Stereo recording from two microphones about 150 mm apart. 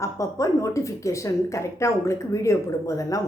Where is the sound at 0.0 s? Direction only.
20° left (ahead or behind).